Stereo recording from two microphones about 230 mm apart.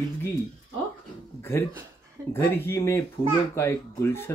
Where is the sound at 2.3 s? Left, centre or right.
Centre.